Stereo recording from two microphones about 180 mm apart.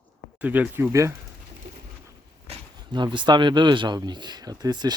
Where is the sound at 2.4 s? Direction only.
30° right (ahead or behind).